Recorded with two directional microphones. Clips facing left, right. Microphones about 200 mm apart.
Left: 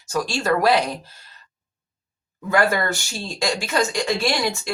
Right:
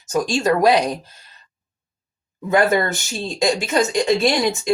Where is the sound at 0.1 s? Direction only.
20° right (ahead or behind).